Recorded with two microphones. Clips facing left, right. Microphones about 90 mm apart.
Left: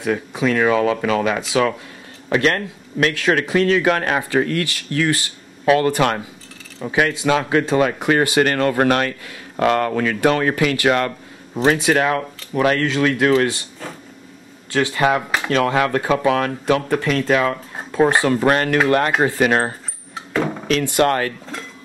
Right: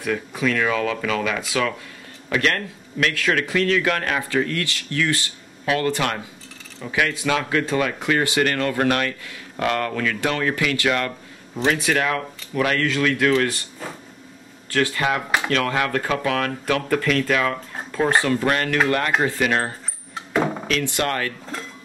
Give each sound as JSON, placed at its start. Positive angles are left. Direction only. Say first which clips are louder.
{"t": 0.0, "sound": "speech", "louder": "left 3 dB", "side_deg": 25}
{"t": 14.7, "sound": "speech", "louder": "left 4 dB", "side_deg": 20}
{"t": 21.0, "sound": "speech", "louder": "left 9 dB", "side_deg": 35}